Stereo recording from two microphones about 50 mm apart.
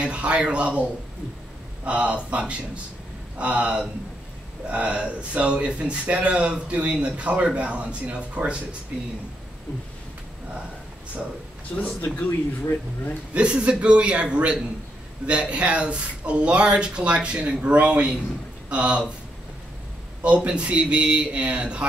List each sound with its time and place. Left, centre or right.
0.0 s speech: right
1.9 s speech: right
11.7 s speech: left
13.3 s speech: right
20.2 s speech: right